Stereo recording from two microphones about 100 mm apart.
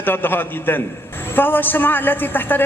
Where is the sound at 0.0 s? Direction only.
20° left (ahead or behind).